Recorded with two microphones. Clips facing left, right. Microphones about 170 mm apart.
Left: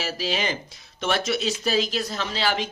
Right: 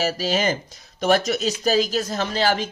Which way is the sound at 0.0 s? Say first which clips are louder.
Right 5 dB; 40° right (ahead or behind).